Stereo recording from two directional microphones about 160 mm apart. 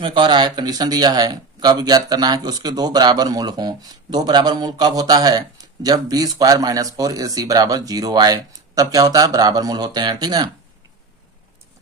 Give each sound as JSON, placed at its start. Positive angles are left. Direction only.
{"t": 0.0, "sound": "speech", "side_deg": -30}